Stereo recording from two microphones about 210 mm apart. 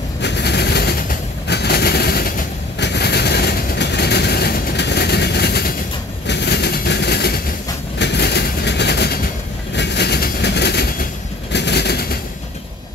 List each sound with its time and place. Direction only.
0.2 s vehicle: 55° left (ahead or behind)
1.5 s a sound: 50° left (ahead or behind)
6.2 s train: 55° left (ahead or behind)
8.0 s vehicle: 55° left (ahead or behind)